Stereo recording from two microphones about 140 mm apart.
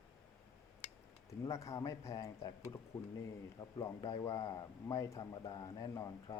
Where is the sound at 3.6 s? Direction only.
25° left (ahead or behind).